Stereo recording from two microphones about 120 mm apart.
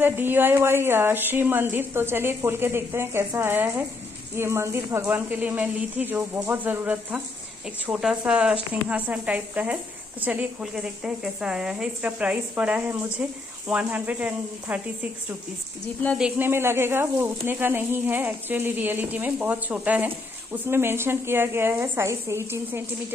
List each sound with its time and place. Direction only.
0.0 s speech: 15° right (ahead or behind)
16.3 s speech: 20° right (ahead or behind)